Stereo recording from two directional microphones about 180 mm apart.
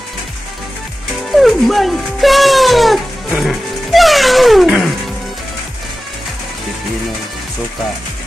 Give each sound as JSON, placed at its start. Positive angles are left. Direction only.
{"t": 1.3, "sound": "speech", "side_deg": 0}